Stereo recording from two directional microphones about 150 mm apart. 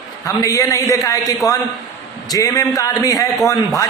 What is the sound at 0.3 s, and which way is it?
A man's voice, 20° left (ahead or behind).